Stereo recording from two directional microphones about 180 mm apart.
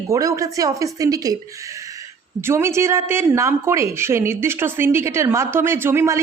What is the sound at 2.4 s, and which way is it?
Speech, 15° right (ahead or behind).